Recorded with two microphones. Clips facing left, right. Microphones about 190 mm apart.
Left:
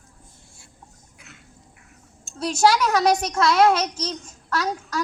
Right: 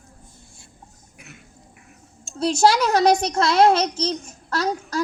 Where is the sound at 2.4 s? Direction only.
30° right (ahead or behind).